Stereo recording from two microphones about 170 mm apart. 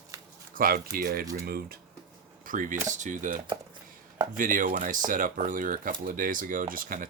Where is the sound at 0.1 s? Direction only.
20° right (ahead or behind).